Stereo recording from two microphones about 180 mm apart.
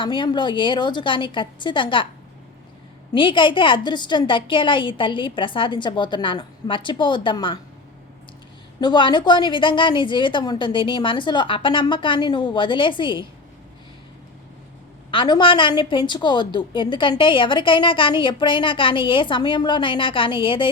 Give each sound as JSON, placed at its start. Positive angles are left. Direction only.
{"t": 0.0, "sound": "a woman's voice", "side_deg": 25}
{"t": 3.1, "sound": "a woman's voice", "side_deg": 25}
{"t": 8.8, "sound": "a woman's voice", "side_deg": 25}
{"t": 15.1, "sound": "a woman's voice", "side_deg": 25}